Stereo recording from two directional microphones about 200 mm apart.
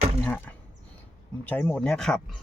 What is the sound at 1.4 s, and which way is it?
Speech, 10° left (ahead or behind).